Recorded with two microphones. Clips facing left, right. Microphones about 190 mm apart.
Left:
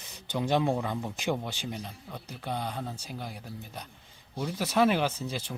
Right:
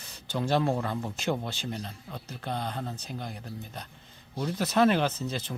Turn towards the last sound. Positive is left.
turn(degrees=10)  # may be behind; listen again after turning